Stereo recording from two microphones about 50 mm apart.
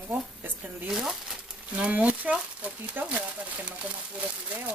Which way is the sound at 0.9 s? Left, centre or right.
Centre.